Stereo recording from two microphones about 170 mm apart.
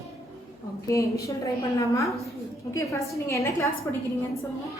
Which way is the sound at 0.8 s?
20° left (ahead or behind).